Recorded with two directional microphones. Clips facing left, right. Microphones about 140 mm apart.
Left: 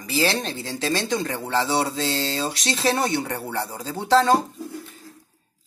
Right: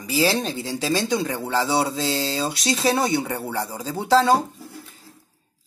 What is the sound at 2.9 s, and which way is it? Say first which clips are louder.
Speech: right 1 dB; 15° right (ahead or behind).